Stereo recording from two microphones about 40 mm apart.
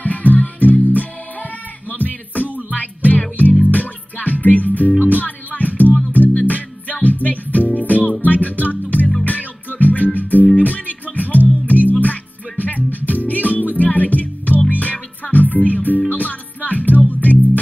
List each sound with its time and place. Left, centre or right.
0.0 s music: left
8.0 s music: right
8.3 s music: left